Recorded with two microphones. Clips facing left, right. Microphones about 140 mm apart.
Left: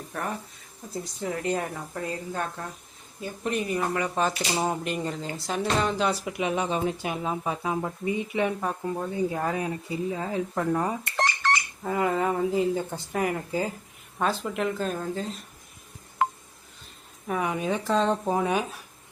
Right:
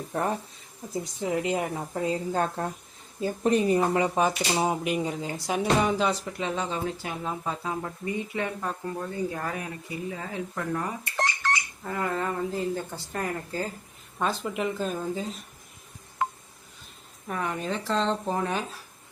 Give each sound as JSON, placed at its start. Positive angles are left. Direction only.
{"t": 0.1, "sound": "a woman's voice", "side_deg": -25}
{"t": 2.3, "sound": "speech", "side_deg": -35}
{"t": 6.1, "sound": "speech", "side_deg": 10}
{"t": 11.8, "sound": "speech", "side_deg": 20}
{"t": 14.2, "sound": "speech", "side_deg": 0}
{"t": 17.2, "sound": "speech", "side_deg": 10}